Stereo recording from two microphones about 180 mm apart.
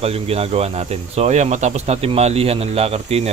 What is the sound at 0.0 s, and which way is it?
Speech, 35° right (ahead or behind).